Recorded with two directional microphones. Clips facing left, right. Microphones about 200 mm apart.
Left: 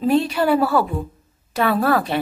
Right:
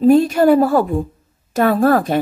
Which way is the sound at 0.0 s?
45° right (ahead or behind).